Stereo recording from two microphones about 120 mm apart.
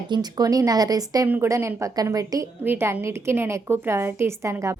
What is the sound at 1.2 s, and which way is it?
Speech, 15° right (ahead or behind).